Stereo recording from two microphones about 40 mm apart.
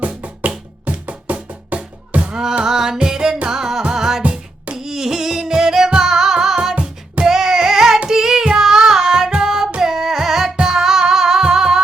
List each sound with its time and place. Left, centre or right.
0.0 s music: right
2.6 s music: centre
4.2 s music: right
4.8 s music: centre
8.1 s child singing: centre
9.3 s music: centre